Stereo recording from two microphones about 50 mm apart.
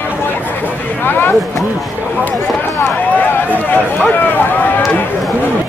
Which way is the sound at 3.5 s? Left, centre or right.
Left.